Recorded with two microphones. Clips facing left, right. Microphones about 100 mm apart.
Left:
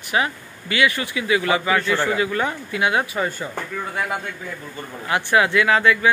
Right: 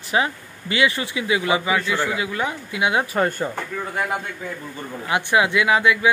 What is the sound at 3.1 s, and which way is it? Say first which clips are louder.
Speech: right 3 dB; 55° right (ahead or behind).